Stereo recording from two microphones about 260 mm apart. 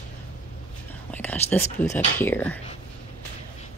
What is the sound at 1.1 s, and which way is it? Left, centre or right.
Speech, centre.